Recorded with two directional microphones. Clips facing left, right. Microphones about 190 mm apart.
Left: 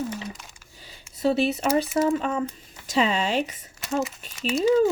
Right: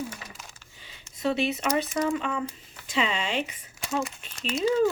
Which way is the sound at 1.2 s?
35° left (ahead or behind).